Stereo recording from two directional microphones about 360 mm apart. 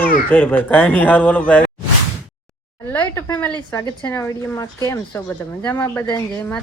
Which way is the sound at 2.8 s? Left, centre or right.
Centre.